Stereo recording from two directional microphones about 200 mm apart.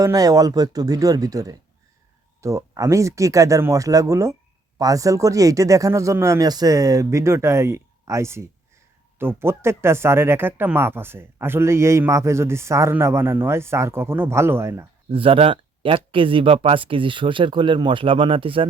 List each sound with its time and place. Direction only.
0.0 s speech: 15° right (ahead or behind)
15.1 s speech: 25° right (ahead or behind)